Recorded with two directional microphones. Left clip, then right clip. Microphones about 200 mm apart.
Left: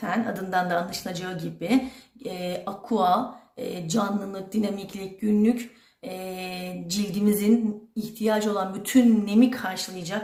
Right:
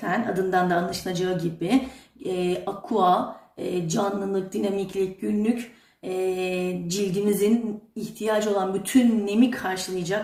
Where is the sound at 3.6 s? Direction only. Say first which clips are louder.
Right 2 dB; 50° left (ahead or behind).